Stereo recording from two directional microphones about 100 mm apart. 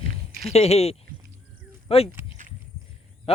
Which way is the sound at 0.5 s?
90° left.